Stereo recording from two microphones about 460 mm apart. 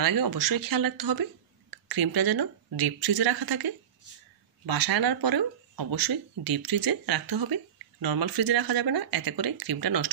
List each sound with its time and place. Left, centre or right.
0.0 s speech: right